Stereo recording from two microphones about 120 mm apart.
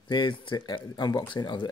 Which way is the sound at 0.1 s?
40° left (ahead or behind).